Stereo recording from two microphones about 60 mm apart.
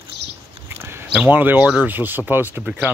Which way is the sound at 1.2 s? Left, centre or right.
Right.